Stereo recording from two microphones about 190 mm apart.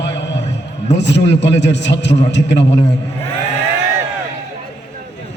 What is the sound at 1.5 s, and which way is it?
Speech, 65° left (ahead or behind).